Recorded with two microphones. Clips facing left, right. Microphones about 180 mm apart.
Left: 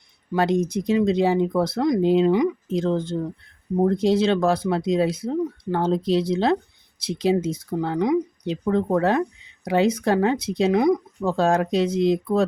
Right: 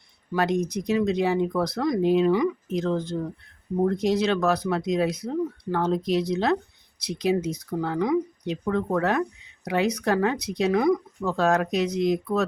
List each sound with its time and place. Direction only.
0.3 s speech: 25° left (ahead or behind)